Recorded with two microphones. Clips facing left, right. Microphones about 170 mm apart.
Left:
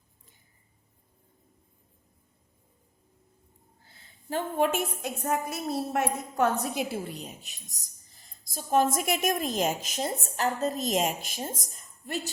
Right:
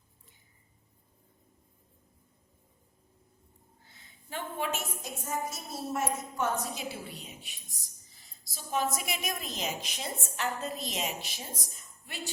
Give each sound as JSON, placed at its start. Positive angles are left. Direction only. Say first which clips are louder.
{"t": 3.8, "sound": "a woman's voice", "louder": "left 11 dB", "side_deg": 35}